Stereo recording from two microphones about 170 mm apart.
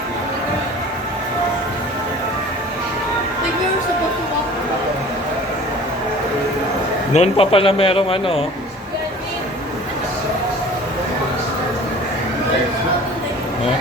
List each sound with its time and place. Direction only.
7.1 s speech: 35° left (ahead or behind)